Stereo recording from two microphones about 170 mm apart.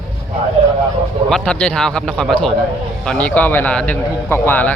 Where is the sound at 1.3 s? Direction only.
5° left (ahead or behind).